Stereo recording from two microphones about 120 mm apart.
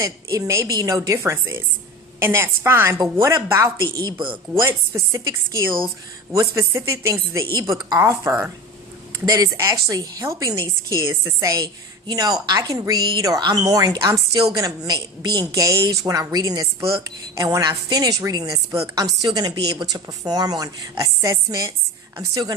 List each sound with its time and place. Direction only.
0.0 s a woman's voice: 30° right (ahead or behind)